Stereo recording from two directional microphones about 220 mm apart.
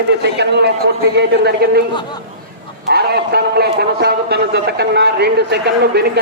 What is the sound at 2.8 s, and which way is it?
A man's voice, 45° right (ahead or behind).